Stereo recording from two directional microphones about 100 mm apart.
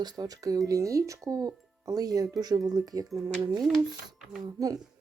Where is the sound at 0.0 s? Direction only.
40° right (ahead or behind).